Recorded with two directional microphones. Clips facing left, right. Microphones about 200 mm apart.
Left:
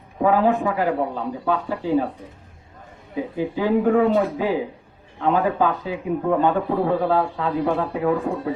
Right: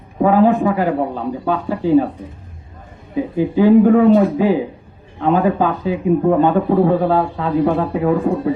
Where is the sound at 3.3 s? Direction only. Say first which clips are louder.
Right 10 dB; 20° right (ahead or behind).